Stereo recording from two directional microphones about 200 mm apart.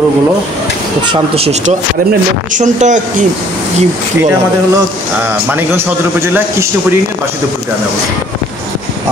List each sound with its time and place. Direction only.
1.0 s speech: 30° right (ahead or behind)
5.5 s a man's voice: 10° right (ahead or behind)